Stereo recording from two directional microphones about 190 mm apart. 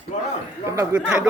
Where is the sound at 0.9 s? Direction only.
5° right (ahead or behind).